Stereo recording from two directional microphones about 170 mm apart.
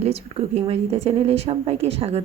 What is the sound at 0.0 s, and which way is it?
A woman's voice, 35° right (ahead or behind).